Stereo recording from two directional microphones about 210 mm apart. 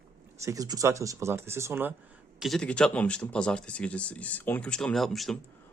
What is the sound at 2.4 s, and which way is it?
Speech, 5° left (ahead or behind).